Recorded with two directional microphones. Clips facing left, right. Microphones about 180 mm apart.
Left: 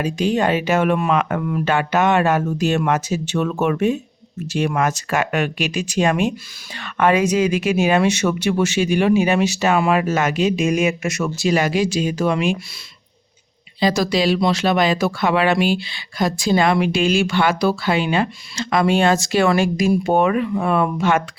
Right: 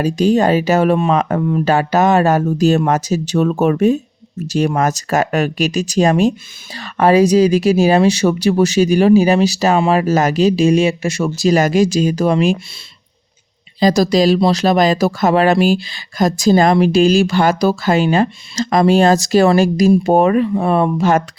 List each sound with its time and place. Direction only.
0.0 s speech: 40° right (ahead or behind)
13.7 s speech: 40° right (ahead or behind)